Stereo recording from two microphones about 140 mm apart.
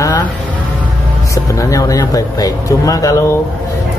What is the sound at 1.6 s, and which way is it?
Speech, 25° left (ahead or behind).